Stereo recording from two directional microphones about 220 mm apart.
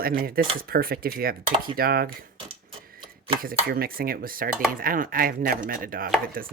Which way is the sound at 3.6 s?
40° right (ahead or behind).